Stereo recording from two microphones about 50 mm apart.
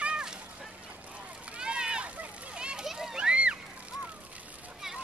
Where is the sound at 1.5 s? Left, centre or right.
Centre.